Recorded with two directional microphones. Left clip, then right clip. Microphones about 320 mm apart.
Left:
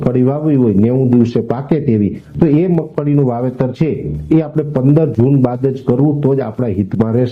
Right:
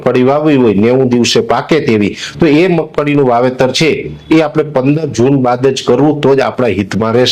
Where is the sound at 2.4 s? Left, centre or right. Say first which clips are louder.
Right 4 dB; right.